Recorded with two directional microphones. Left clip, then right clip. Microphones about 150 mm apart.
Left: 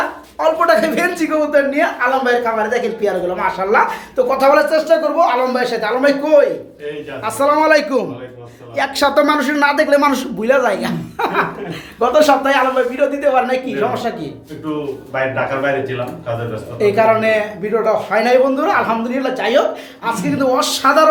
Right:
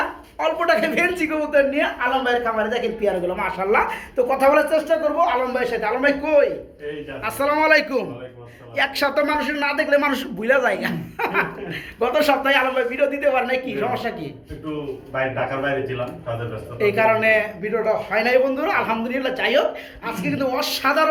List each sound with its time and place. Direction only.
0.3 s a man's voice: centre (ahead or behind)
9.1 s a man's voice: 35° left (ahead or behind); by 14.1 s 5° left (ahead or behind)
16.7 s a man's voice: 5° left (ahead or behind)